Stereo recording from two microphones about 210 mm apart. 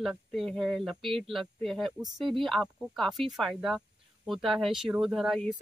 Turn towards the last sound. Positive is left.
turn(degrees=0)  # may be behind; listen again after turning